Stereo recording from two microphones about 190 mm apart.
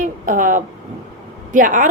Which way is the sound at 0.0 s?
45° right (ahead or behind).